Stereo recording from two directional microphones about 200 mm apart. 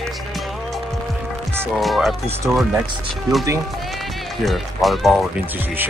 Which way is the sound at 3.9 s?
Centre (ahead or behind).